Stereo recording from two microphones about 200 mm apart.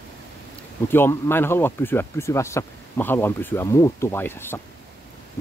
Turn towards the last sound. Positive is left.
turn(degrees=10)  # may be behind; listen again after turning